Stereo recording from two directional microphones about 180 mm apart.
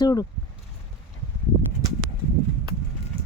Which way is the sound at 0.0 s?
20° left (ahead or behind).